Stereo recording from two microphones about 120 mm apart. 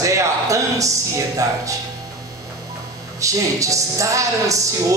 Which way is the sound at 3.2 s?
25° right (ahead or behind).